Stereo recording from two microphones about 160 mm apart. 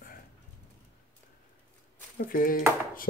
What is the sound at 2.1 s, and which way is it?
Speech, 60° left (ahead or behind).